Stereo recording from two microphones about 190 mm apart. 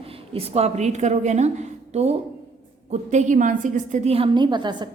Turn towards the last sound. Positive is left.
turn(degrees=-25)  # may be behind; listen again after turning